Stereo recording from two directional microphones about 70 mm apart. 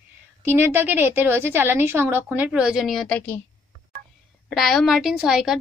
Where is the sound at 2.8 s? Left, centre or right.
Centre.